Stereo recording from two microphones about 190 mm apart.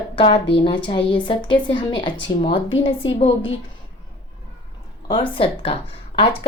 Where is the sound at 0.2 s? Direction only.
30° left (ahead or behind).